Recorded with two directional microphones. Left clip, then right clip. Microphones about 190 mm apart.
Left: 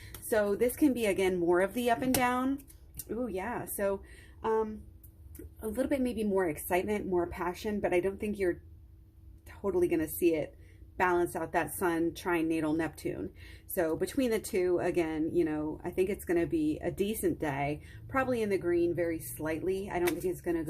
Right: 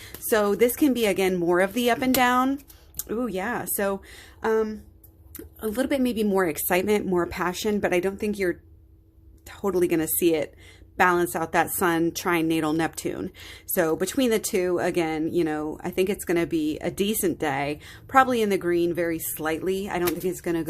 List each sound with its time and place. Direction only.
0.0 s a woman's voice: 30° right (ahead or behind)
5.5 s a woman's voice: 30° right (ahead or behind)